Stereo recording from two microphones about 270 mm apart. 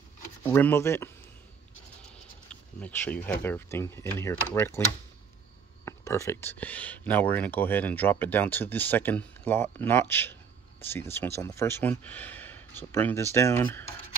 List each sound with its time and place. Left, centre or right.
0.4 s speech: centre
2.5 s speech: centre
5.9 s speech: centre